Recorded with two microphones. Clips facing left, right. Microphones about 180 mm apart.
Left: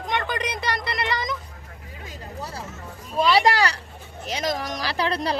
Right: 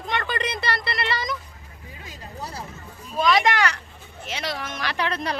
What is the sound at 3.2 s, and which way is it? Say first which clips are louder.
Speech: left 1 dB; 30° left (ahead or behind).